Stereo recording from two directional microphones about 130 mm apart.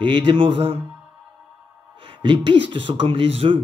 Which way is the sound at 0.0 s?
40° right (ahead or behind).